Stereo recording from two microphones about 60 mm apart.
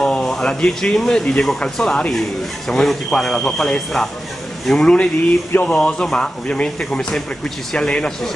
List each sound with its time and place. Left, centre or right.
0.0 s speech: centre